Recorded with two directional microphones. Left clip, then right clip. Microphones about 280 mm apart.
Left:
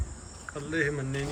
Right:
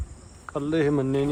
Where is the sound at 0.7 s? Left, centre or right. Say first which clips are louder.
Right 6 dB; centre.